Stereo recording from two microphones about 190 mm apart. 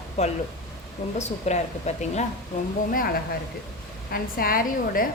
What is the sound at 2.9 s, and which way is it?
A woman's voice, 50° left (ahead or behind).